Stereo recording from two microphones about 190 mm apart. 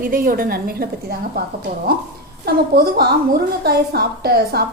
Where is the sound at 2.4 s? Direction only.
55° right (ahead or behind).